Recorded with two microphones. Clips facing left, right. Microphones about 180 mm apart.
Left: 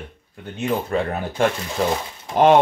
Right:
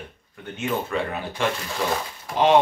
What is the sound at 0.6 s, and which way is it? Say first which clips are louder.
Speech: left 4 dB; 35° left (ahead or behind).